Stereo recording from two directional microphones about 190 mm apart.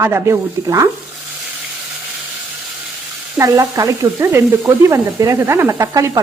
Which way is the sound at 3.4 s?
15° right (ahead or behind).